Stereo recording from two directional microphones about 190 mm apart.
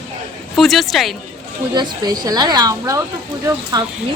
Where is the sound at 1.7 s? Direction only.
20° right (ahead or behind).